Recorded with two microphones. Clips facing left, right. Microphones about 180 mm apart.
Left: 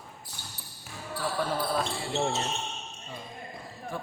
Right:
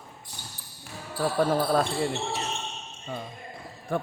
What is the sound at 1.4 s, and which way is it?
Speech, 50° right (ahead or behind).